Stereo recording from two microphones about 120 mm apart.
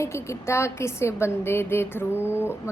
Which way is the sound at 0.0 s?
25° left (ahead or behind).